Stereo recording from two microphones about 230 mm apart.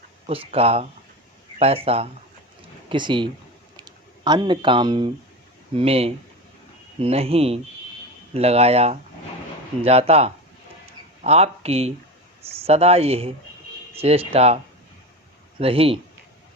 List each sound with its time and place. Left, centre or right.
0.3 s speech: right